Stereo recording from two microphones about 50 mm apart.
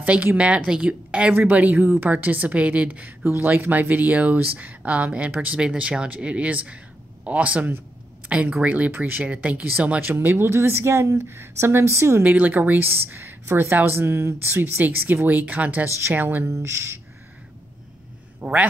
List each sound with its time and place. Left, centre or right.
0.0 s speech: right
1.3 s speech: right
2.5 s speech: right
3.3 s speech: right
8.9 s a woman's voice: right
9.2 s speech: right
10.1 s speech: right
12.2 s a woman's voice: right
16.4 s speech: right
18.4 s a sound: right